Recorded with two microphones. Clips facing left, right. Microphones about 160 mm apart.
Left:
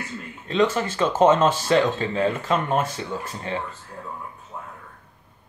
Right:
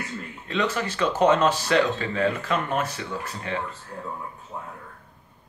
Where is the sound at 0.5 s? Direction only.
25° left (ahead or behind).